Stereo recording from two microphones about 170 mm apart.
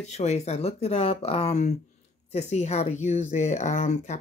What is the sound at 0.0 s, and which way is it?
Speech, 40° left (ahead or behind).